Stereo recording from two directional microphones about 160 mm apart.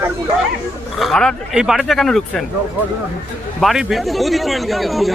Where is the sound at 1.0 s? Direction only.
5° left (ahead or behind).